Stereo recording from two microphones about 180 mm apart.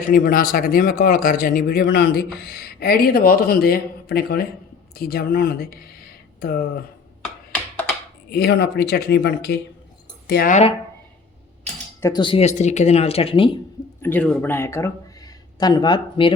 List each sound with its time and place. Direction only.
0.1 s a man's voice: 50° left (ahead or behind)
8.3 s a man's voice: 65° left (ahead or behind)
10.5 s speech: 35° left (ahead or behind)
11.9 s speech: 20° left (ahead or behind)
14.0 s speech: 10° left (ahead or behind); by 16.3 s 25° left (ahead or behind)